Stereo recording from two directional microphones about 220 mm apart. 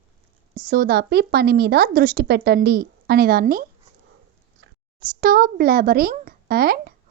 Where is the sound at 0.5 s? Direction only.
40° right (ahead or behind).